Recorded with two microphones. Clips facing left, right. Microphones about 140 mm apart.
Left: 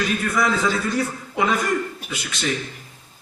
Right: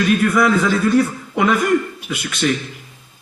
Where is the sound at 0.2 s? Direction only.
60° right (ahead or behind).